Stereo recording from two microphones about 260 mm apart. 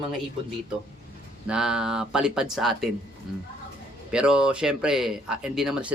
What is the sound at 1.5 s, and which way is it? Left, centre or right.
Speech, centre.